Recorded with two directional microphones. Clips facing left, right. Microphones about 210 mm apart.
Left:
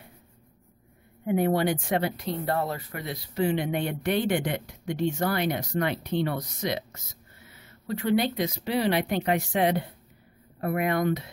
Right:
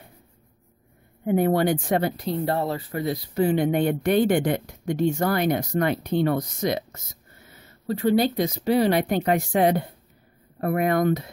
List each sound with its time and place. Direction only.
1.2 s speech: 50° right (ahead or behind)